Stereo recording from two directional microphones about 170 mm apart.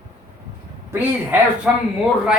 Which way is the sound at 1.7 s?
5° right (ahead or behind).